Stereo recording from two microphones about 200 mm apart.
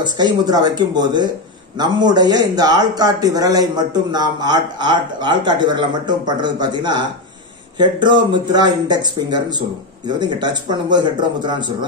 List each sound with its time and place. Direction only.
0.0 s speech: 20° right (ahead or behind)